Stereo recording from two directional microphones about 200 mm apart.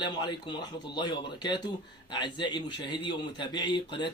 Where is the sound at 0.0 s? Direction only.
20° left (ahead or behind).